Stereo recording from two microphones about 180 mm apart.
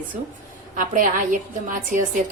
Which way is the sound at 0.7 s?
45° right (ahead or behind).